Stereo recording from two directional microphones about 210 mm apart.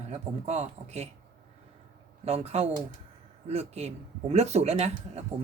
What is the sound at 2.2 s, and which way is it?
Speech, 30° right (ahead or behind).